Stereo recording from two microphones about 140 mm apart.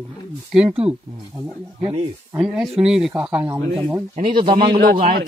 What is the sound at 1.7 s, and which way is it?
Speech, 45° right (ahead or behind).